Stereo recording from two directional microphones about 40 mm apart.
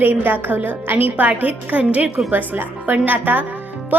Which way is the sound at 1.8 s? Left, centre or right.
Right.